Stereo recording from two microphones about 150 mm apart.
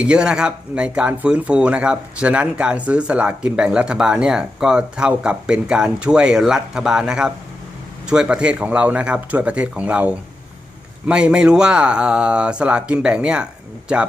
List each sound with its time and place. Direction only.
0.0 s speech: 5° right (ahead or behind)